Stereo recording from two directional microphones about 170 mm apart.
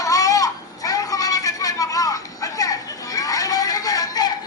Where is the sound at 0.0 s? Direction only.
20° left (ahead or behind).